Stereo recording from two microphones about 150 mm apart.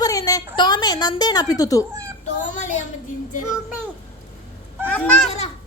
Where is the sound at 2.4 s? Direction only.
55° left (ahead or behind).